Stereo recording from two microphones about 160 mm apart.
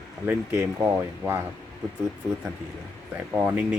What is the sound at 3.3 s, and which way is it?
Speech, 10° right (ahead or behind).